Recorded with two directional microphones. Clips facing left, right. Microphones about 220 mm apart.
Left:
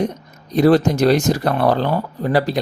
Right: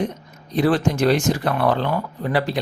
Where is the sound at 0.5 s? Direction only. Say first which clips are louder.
Left 5 dB; 40° left (ahead or behind).